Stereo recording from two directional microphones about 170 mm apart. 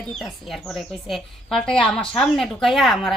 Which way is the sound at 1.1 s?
5° left (ahead or behind).